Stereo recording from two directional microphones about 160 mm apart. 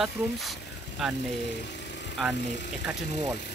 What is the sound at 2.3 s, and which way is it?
Speech, 90° left.